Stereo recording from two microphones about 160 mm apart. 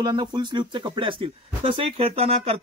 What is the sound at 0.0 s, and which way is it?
A man's voice, 25° right (ahead or behind).